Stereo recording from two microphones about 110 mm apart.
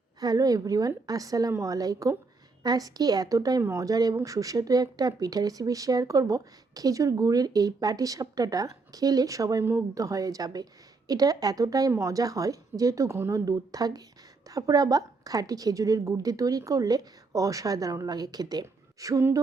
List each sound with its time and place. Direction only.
0.2 s speech: 35° right (ahead or behind)